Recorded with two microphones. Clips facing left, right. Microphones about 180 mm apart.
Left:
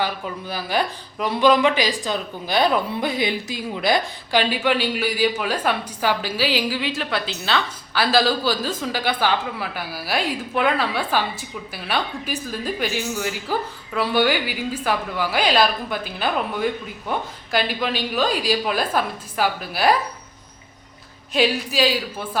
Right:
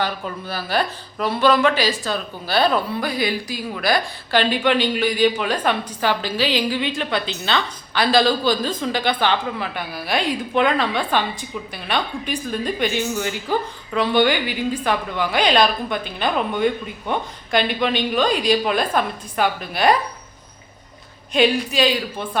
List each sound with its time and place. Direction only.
0.0 s speech: 15° left (ahead or behind)
21.3 s speech: 5° left (ahead or behind)